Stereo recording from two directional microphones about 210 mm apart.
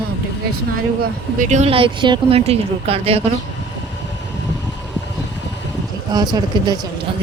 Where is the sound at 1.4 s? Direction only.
35° right (ahead or behind).